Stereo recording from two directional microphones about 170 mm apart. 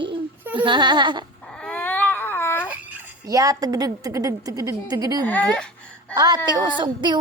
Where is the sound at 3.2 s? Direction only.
20° right (ahead or behind).